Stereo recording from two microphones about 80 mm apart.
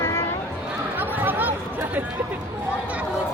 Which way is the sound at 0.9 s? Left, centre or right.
Right.